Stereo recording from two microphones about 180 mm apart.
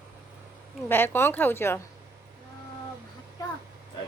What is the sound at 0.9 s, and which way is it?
Speech, 10° left (ahead or behind).